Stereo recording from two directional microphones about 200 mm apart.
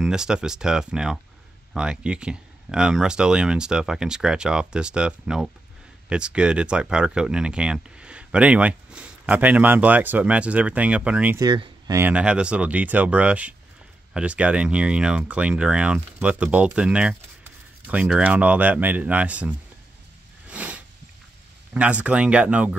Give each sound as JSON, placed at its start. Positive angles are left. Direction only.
{"t": 0.0, "sound": "speech", "side_deg": -5}
{"t": 11.4, "sound": "speech", "side_deg": -20}
{"t": 12.0, "sound": "speech", "side_deg": -5}
{"t": 20.4, "sound": "a sound", "side_deg": -5}
{"t": 21.7, "sound": "speech", "side_deg": -5}